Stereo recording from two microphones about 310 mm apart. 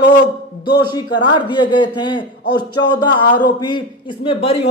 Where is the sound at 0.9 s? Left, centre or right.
Centre.